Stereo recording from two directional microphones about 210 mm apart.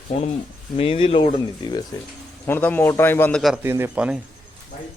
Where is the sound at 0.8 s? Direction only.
30° left (ahead or behind).